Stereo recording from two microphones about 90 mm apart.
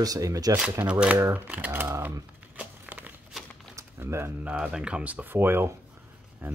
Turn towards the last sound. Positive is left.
turn(degrees=-25)  # may be behind; listen again after turning